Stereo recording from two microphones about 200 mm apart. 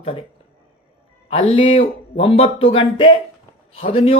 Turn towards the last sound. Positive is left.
turn(degrees=30)  # may be behind; listen again after turning